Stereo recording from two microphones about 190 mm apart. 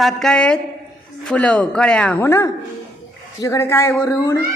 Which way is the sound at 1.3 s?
5° left (ahead or behind).